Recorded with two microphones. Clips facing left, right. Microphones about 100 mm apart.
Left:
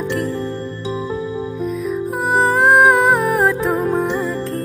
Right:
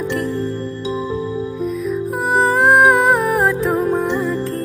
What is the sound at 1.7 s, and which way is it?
Music, centre (ahead or behind).